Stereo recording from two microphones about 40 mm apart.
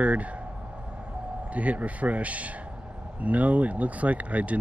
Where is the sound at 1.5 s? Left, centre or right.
Right.